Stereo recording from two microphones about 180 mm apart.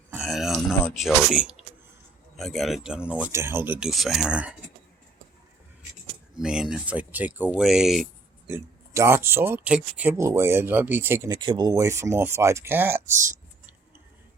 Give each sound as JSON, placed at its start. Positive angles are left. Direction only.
{"t": 0.1, "sound": "a sound", "side_deg": 0}
{"t": 0.9, "sound": "speech", "side_deg": -5}
{"t": 6.3, "sound": "speech", "side_deg": -5}
{"t": 8.4, "sound": "speech", "side_deg": -15}
{"t": 11.3, "sound": "speech", "side_deg": -25}